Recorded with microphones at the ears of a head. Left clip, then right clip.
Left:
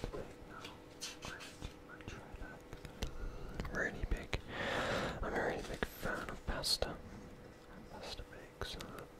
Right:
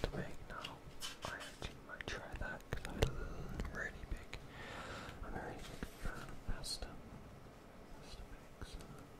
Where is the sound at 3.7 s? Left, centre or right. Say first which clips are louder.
Left 8 dB; left.